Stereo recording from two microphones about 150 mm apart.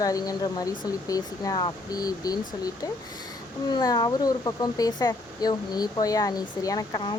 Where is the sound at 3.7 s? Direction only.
25° left (ahead or behind).